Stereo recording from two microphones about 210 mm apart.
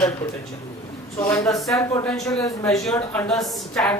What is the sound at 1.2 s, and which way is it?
A woman's voice, 15° left (ahead or behind).